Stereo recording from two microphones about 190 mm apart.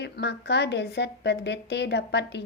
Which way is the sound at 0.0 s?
65° left (ahead or behind).